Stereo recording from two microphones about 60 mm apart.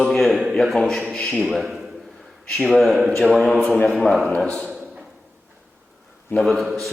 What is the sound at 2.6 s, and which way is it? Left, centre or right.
Speech, centre.